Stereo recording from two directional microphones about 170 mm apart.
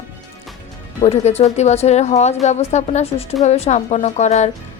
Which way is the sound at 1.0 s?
40° left (ahead or behind).